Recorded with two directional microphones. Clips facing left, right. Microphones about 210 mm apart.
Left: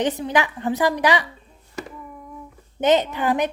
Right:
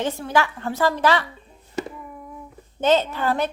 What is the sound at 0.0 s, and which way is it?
A woman's voice, 20° left (ahead or behind).